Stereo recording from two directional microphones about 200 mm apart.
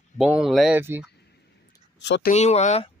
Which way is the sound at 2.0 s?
60° left (ahead or behind).